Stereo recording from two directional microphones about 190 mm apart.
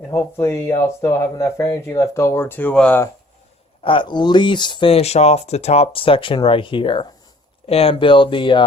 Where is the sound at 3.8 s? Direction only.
25° left (ahead or behind).